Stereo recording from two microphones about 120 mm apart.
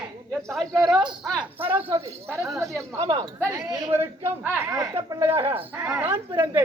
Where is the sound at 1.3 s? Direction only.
15° right (ahead or behind).